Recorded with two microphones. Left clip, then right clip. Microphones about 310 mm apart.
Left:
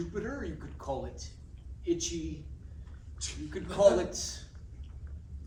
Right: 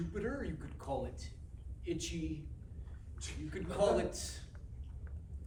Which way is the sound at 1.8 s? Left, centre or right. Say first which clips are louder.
Left 8 dB; centre.